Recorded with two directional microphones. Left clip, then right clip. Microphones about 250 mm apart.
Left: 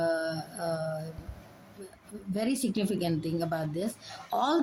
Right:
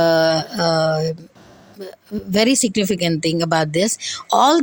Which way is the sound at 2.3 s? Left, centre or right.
Right.